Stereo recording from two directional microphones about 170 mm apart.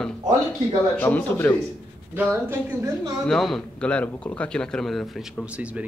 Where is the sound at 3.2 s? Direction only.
Centre (ahead or behind).